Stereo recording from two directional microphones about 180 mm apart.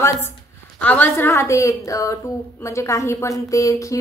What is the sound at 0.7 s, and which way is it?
A woman's voice, 10° left (ahead or behind).